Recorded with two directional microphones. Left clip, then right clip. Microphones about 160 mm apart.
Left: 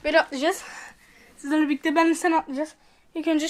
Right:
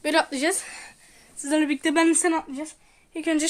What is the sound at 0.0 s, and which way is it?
Speech, 20° right (ahead or behind).